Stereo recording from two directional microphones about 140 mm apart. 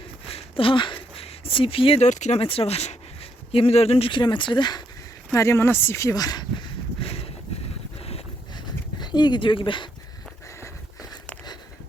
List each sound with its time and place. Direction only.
0.3 s a sound: 40° left (ahead or behind)
2.0 s speech: 55° left (ahead or behind)
2.4 s speech: 45° left (ahead or behind)
5.3 s speech: 20° left (ahead or behind)
8.5 s dog: 30° left (ahead or behind)